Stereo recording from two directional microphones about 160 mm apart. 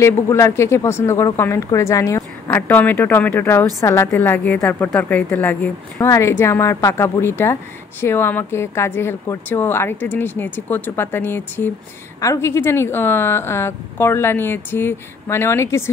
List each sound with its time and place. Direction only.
0.0 s speech: 15° left (ahead or behind)